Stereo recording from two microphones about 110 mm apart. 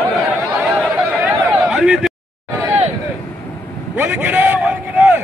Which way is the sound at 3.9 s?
15° right (ahead or behind).